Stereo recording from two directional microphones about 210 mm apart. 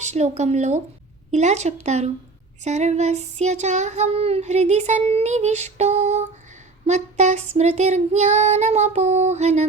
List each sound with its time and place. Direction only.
0.0 s child singing: 35° right (ahead or behind)